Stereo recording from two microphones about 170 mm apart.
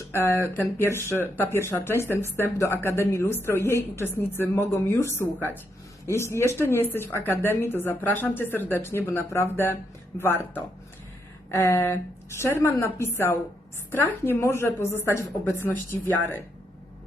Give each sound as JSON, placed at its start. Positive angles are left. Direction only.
{"t": 0.1, "sound": "a woman's voice", "side_deg": 15}